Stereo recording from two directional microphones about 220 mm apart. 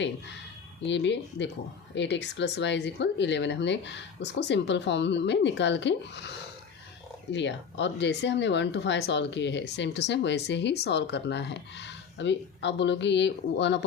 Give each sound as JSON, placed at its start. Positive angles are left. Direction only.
{"t": 0.9, "sound": "speech", "side_deg": 55}